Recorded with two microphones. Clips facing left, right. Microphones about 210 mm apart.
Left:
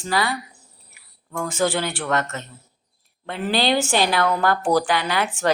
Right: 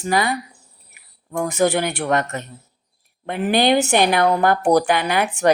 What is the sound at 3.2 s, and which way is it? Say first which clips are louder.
A woman's voice: right 4 dB; 15° right (ahead or behind).